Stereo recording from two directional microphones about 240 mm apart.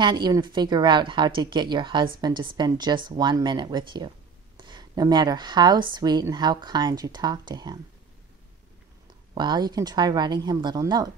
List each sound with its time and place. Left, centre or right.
0.0 s speech: centre
9.3 s speech: centre